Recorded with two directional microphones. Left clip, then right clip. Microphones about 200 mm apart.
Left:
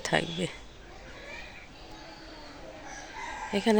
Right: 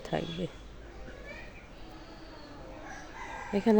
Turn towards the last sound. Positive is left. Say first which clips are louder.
# left 1 dB
turn(degrees=-10)  # may be behind; listen again after turning